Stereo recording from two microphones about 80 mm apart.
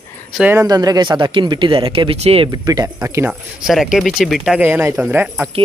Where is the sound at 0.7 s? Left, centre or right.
Right.